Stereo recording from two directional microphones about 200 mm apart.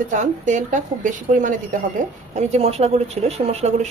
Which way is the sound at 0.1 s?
40° right (ahead or behind).